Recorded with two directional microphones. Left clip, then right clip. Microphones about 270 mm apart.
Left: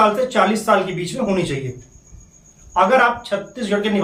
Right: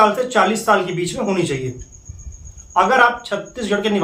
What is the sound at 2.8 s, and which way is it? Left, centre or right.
Speech, centre.